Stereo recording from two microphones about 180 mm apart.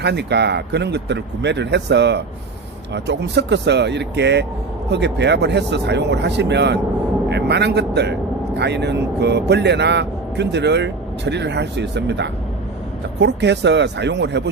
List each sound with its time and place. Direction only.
0.0 s speech: 70° right (ahead or behind)